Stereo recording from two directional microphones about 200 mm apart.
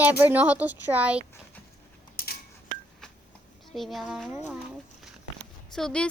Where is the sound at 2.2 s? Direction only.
45° left (ahead or behind).